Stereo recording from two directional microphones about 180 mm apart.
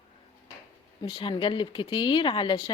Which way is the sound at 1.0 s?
25° left (ahead or behind).